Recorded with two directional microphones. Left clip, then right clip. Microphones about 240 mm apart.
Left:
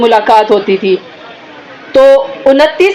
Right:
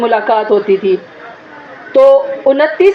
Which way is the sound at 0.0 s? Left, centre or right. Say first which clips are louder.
Left 5 dB; left.